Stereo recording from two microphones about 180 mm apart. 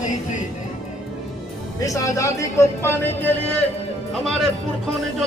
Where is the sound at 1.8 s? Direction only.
20° left (ahead or behind).